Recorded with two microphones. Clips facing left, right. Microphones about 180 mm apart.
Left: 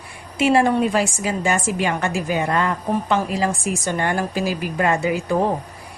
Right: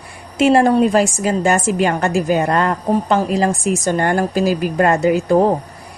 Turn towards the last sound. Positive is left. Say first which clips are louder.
# right 6 dB
turn(degrees=-40)  # may be behind; listen again after turning